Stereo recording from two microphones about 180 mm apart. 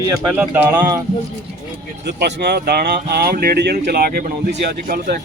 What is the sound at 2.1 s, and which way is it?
Speech, 65° right (ahead or behind).